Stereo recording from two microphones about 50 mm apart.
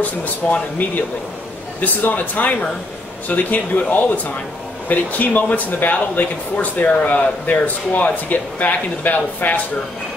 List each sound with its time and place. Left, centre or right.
0.0 s speech: left